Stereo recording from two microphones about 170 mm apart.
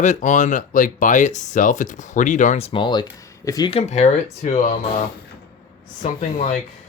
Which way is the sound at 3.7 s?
40° left (ahead or behind).